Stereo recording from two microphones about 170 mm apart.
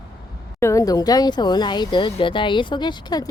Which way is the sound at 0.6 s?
20° left (ahead or behind).